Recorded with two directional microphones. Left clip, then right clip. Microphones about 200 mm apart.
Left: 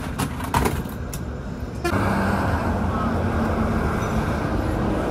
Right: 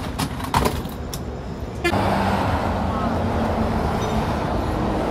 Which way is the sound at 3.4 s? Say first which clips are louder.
Right 1 dB; 50° right (ahead or behind).